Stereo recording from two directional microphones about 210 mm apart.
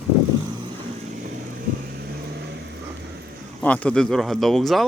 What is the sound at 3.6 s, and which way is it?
Speech, 5° left (ahead or behind).